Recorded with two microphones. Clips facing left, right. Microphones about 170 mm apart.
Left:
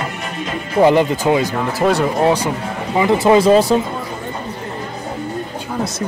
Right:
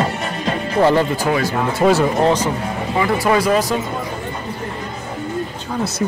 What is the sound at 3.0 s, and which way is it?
Speech, 20° left (ahead or behind).